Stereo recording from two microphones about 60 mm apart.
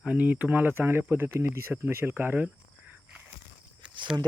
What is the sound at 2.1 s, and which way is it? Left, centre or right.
Speech, right.